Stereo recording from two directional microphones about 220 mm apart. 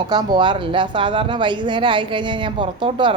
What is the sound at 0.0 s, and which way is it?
Speech, 20° right (ahead or behind).